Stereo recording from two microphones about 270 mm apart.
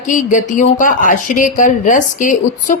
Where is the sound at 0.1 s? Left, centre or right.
Left.